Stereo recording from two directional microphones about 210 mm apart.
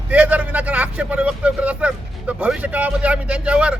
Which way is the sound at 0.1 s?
5° right (ahead or behind).